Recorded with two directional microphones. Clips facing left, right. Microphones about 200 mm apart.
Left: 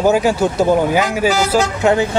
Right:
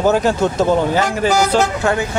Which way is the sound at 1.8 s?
20° left (ahead or behind).